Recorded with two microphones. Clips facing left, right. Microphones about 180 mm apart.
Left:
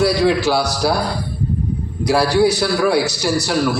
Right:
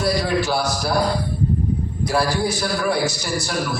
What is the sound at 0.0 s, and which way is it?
Speech, 75° left (ahead or behind).